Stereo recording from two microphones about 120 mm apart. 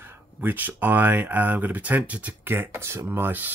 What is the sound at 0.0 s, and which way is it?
Speech, 20° right (ahead or behind).